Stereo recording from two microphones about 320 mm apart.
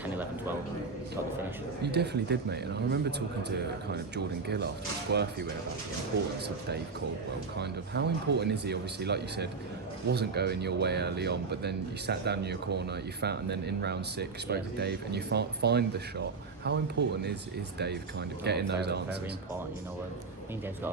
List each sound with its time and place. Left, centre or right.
0.0 s speech: centre
1.8 s speech: right
7.6 s speech: right